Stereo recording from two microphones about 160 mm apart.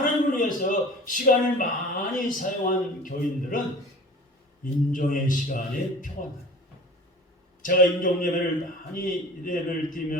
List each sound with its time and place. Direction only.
0.0 s a man's voice: 55° left (ahead or behind)
4.9 s a man's voice: 55° left (ahead or behind)
7.6 s a man's voice: 55° left (ahead or behind)